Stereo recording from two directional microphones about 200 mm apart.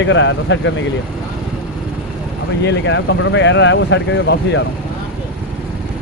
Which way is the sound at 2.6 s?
65° left (ahead or behind).